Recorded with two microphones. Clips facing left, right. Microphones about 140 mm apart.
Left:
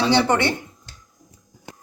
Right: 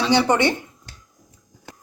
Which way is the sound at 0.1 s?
15° right (ahead or behind).